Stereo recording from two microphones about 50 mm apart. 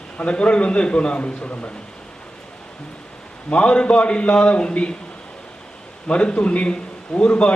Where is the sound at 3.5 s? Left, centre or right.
Centre.